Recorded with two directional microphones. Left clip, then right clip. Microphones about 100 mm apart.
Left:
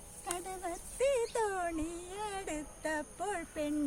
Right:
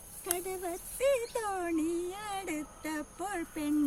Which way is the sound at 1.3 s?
55° left (ahead or behind).